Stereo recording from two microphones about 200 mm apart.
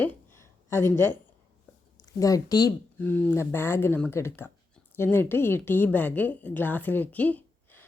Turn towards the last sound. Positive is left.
turn(degrees=10)  # may be behind; listen again after turning